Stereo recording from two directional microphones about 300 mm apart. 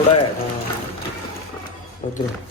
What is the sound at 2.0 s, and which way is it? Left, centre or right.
Speech, left.